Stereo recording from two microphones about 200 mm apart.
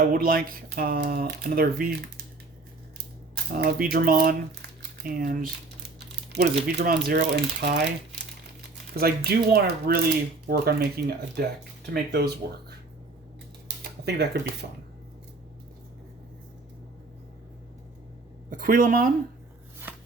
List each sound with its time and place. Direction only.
0.1 s speech: 45° right (ahead or behind)
3.5 s speech: 45° right (ahead or behind)
14.0 s speech: 55° right (ahead or behind)
18.5 s speech: 45° right (ahead or behind)
19.9 s shuffling cards: 10° right (ahead or behind)